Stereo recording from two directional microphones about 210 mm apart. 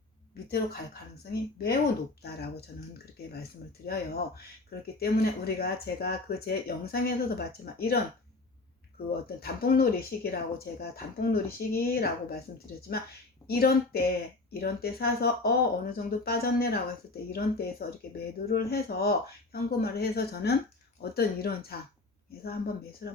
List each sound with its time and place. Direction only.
1.2 s speech: 50° left (ahead or behind)
3.8 s speech: 50° left (ahead or behind)
9.4 s speech: 45° left (ahead or behind)